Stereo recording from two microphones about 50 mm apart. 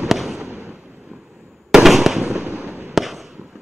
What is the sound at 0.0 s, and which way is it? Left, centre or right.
Fireworks, centre.